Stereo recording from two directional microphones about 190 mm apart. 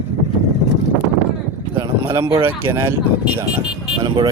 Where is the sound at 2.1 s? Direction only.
20° right (ahead or behind).